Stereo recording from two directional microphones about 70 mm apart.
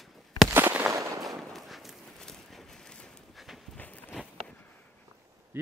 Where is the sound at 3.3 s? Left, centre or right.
Centre.